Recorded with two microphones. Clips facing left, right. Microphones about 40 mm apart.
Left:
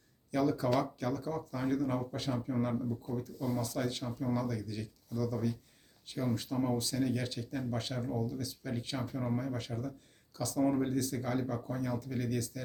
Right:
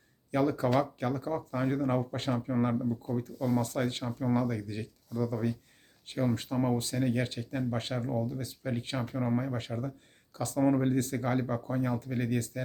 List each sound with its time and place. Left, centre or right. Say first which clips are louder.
0.3 s speech: right 3 dB; right
2.5 s speech: right 5 dB; right